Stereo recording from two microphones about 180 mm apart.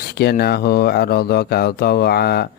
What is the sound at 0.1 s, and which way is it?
Speech, 60° left (ahead or behind).